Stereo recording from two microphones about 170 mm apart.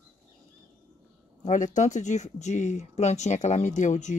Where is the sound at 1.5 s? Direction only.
45° left (ahead or behind).